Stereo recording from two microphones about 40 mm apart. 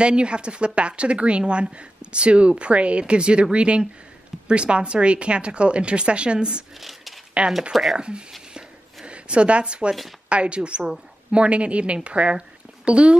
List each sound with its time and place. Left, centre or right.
0.0 s speech: right
6.8 s a sound: centre
7.4 s speech: right
7.7 s speech: centre
8.0 s speech: right
8.5 s a sound: right
10.3 s speech: right